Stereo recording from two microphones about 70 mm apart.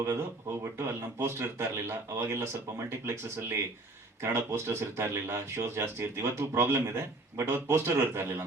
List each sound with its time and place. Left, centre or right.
0.6 s speech: right